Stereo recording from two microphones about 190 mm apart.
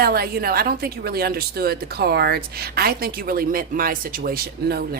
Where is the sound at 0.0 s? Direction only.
55° right (ahead or behind).